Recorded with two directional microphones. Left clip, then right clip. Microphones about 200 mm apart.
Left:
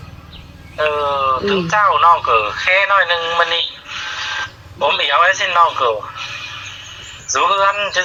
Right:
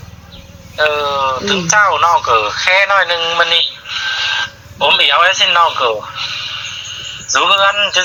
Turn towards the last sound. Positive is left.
turn(degrees=-35)  # may be behind; listen again after turning